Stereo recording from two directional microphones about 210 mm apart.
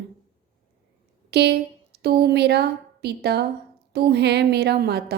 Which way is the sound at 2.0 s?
50° right (ahead or behind).